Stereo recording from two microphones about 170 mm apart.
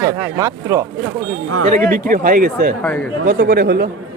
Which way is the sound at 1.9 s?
55° right (ahead or behind).